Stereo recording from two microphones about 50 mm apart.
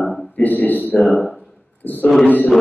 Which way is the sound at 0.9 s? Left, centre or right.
Left.